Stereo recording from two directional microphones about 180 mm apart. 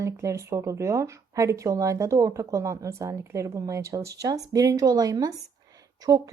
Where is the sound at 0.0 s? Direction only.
15° right (ahead or behind).